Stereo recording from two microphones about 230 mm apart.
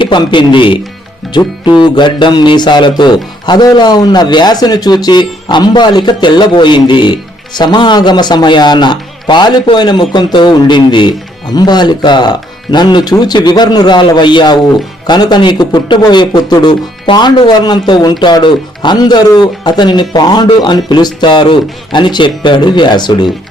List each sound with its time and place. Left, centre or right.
0.0 s a man's voice: left
1.8 s a man's voice: centre